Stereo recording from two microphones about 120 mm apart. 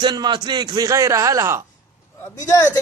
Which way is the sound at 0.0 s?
35° right (ahead or behind).